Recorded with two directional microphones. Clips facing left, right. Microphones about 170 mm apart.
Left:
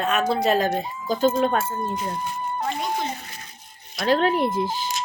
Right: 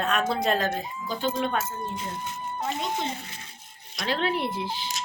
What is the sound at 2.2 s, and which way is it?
A child's voice, 20° right (ahead or behind).